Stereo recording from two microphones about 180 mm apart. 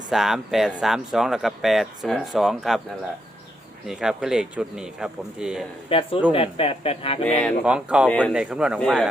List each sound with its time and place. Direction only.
0.1 s speech: centre (ahead or behind)
3.8 s speech: 5° right (ahead or behind)
5.9 s speech: 30° left (ahead or behind)
7.6 s speech: 5° right (ahead or behind)